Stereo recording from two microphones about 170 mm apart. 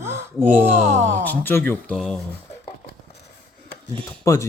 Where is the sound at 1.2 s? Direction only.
10° left (ahead or behind).